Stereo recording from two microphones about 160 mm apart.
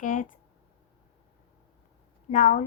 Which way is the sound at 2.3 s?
50° left (ahead or behind).